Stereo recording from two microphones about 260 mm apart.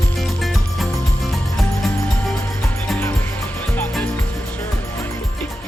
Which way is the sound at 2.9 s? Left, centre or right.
Centre.